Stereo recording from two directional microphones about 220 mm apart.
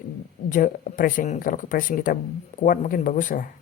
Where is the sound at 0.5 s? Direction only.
35° left (ahead or behind).